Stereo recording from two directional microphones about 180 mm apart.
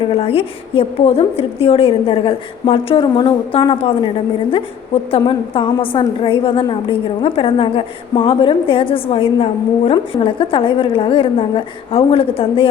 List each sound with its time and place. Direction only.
0.1 s a woman's voice: 30° left (ahead or behind)
5.1 s a woman's voice: 30° left (ahead or behind)